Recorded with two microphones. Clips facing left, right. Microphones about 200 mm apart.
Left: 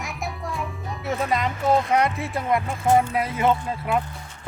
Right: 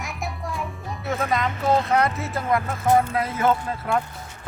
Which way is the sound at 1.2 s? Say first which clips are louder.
Even; 20° left (ahead or behind).